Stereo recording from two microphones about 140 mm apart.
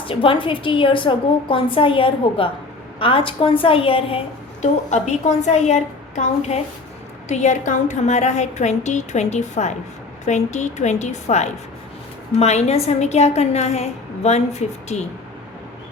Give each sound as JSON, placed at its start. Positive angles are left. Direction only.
{"t": 0.0, "sound": "a woman's voice", "side_deg": 40}
{"t": 4.6, "sound": "a woman's voice", "side_deg": 55}